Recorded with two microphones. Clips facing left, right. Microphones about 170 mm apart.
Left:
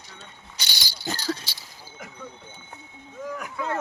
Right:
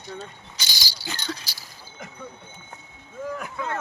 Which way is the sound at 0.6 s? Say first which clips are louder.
Right 1 dB; 65° left (ahead or behind).